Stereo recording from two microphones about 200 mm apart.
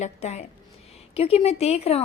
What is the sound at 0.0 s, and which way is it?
A woman's voice, 35° left (ahead or behind).